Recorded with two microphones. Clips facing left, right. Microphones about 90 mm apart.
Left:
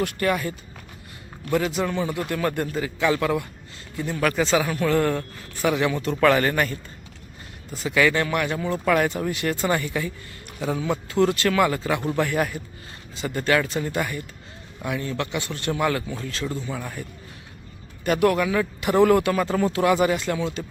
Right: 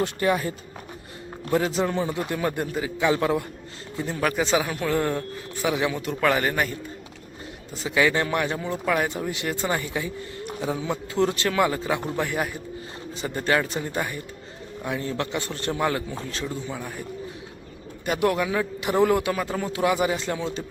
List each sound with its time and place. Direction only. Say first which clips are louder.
0.0 s a man's voice: even; 25° right (ahead or behind)
2.0 s speech: left 1 dB; 15° right (ahead or behind)
3.2 s speech: even; 30° right (ahead or behind); by 6.7 s 10° right (ahead or behind)
7.7 s a man's voice: left 1 dB; 25° right (ahead or behind)